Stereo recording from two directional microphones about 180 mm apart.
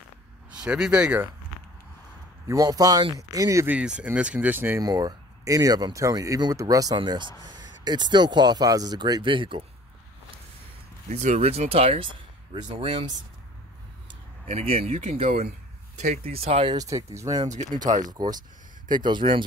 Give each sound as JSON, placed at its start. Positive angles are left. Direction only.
{"t": 0.5, "sound": "speech", "side_deg": -5}
{"t": 2.4, "sound": "speech", "side_deg": -20}
{"t": 11.1, "sound": "speech", "side_deg": -40}
{"t": 14.4, "sound": "speech", "side_deg": -35}
{"t": 17.5, "sound": "speech", "side_deg": -40}
{"t": 18.0, "sound": "speech", "side_deg": -20}